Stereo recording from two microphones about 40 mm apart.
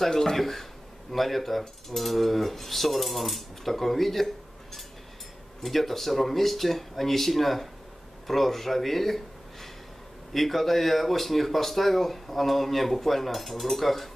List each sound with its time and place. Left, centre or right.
0.0 s speech: centre
5.6 s speech: centre